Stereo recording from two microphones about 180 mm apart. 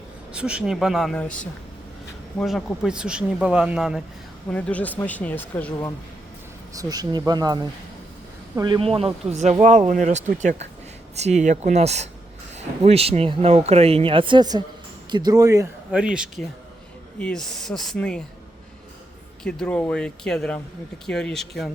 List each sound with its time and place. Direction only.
0.3 s speech: 5° right (ahead or behind)
4.4 s speech: 10° left (ahead or behind)
6.7 s speech: 20° right (ahead or behind)
15.9 s speech: 5° right (ahead or behind)
17.2 s speech: 5° left (ahead or behind)
19.4 s speech: 5° left (ahead or behind)